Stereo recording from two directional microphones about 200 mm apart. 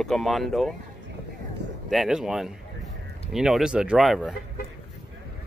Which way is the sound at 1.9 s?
Centre (ahead or behind).